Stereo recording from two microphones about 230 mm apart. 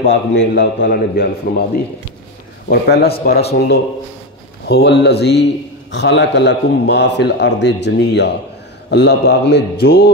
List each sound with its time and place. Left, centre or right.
0.0 s a man's voice: left
4.6 s a man's voice: left